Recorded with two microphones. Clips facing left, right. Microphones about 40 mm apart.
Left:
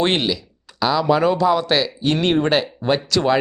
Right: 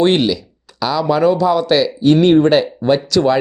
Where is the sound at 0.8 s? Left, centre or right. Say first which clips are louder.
Right 2 dB; centre.